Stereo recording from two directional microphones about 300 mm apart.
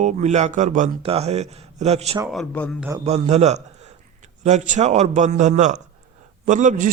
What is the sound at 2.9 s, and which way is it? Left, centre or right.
Speech, right.